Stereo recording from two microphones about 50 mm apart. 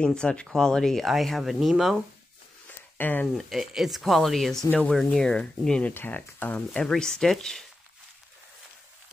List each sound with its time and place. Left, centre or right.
0.0 s speech: centre
3.0 s speech: left
3.3 s speech: centre
5.1 s speech: centre
5.9 s speech: left
6.8 s speech: centre